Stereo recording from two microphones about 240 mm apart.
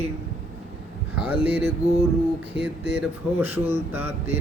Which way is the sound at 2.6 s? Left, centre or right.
Left.